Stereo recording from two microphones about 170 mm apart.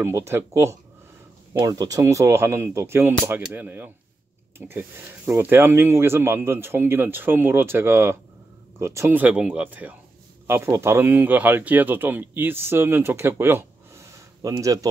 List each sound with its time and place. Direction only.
0.0 s speech: 15° right (ahead or behind)